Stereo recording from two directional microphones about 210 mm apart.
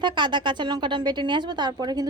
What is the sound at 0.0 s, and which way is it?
Speech, 20° right (ahead or behind).